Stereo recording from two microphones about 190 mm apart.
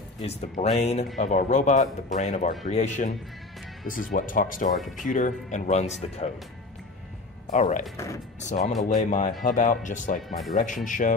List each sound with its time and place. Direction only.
0.2 s speech: 35° left (ahead or behind)
4.7 s speech: centre (ahead or behind)
5.0 s speech: 40° left (ahead or behind)
7.5 s speech: 40° left (ahead or behind)